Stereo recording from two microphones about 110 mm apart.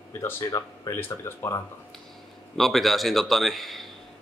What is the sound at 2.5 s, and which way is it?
Speech, centre (ahead or behind).